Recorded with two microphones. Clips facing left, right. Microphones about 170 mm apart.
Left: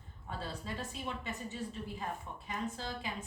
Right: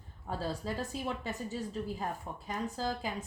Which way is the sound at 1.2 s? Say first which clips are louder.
Right 3 dB; 40° right (ahead or behind).